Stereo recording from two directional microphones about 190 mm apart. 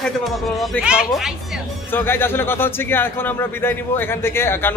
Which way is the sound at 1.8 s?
10° left (ahead or behind).